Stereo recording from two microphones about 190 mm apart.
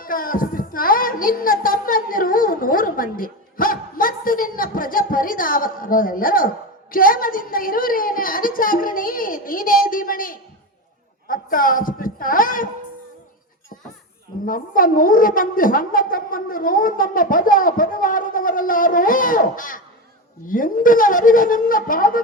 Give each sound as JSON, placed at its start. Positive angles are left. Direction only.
{"t": 0.0, "sound": "a woman's voice", "side_deg": 45}
{"t": 14.4, "sound": "a woman's voice", "side_deg": 45}